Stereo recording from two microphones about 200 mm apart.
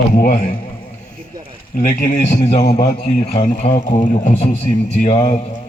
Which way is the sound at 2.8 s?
30° left (ahead or behind).